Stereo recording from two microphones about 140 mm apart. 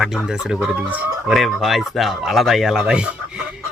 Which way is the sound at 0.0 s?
5° right (ahead or behind).